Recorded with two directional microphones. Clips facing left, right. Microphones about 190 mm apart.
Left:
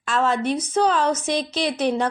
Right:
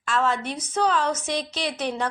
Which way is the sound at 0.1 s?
20° left (ahead or behind).